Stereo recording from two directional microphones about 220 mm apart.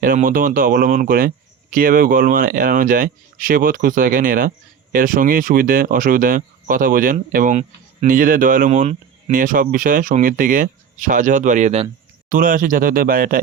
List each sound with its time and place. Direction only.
0.0 s speech: 40° right (ahead or behind)